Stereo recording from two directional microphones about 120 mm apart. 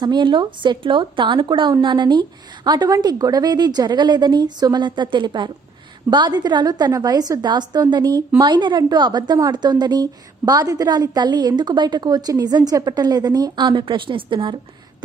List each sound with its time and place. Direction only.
0.0 s a woman's voice: 40° right (ahead or behind)